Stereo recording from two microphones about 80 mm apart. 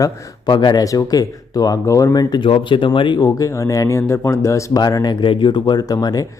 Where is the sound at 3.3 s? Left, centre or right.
Left.